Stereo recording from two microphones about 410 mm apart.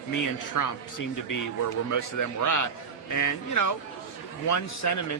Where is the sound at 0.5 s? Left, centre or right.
Left.